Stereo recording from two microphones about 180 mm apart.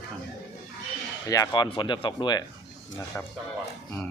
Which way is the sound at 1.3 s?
20° left (ahead or behind).